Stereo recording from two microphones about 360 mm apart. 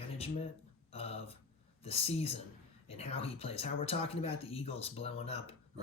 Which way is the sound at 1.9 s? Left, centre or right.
Centre.